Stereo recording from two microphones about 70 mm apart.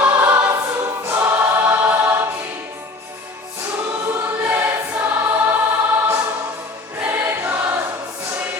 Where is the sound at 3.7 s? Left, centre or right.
Right.